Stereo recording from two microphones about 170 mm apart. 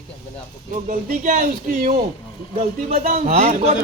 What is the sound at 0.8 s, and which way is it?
Speech, 45° right (ahead or behind).